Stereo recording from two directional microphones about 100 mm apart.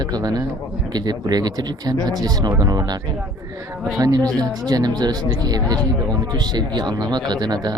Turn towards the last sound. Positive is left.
turn(degrees=-45)  # may be behind; listen again after turning